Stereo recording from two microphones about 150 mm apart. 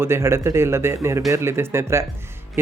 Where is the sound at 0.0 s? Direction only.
15° right (ahead or behind).